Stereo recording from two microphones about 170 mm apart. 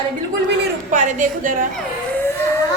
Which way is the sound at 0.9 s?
45° right (ahead or behind).